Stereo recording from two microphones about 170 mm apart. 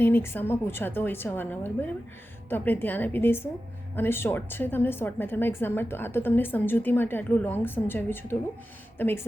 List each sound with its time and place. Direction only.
0.0 s a woman's voice: 15° left (ahead or behind)